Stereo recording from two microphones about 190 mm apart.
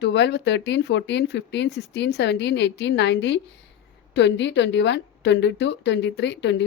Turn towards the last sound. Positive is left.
turn(degrees=70)  # may be behind; listen again after turning